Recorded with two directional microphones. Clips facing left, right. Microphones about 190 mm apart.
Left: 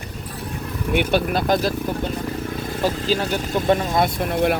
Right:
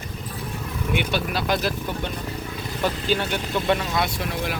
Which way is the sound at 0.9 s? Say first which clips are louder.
Left 6 dB; 50° left (ahead or behind).